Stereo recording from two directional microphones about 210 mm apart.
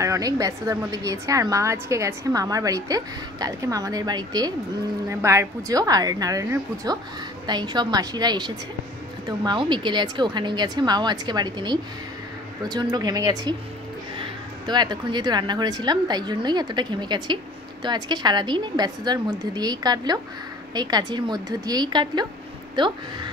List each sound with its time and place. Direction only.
0.0 s a woman's voice: 15° right (ahead or behind)
14.7 s a woman's voice: 20° right (ahead or behind)